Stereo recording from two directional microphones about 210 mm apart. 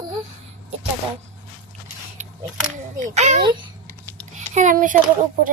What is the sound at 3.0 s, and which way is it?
A child's voice, 35° right (ahead or behind).